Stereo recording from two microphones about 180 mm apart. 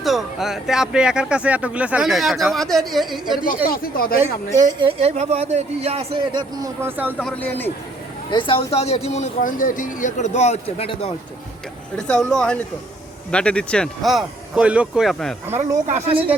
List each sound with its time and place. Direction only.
0.0 s speech: centre (ahead or behind)
3.4 s speech: 50° left (ahead or behind)
4.5 s a man's voice: 25° right (ahead or behind)
6.6 s speech: 10° right (ahead or behind)
7.2 s speech: 10° left (ahead or behind)
8.3 s speech: 25° left (ahead or behind)
11.9 s speech: 5° left (ahead or behind)
15.4 s speech: 10° right (ahead or behind)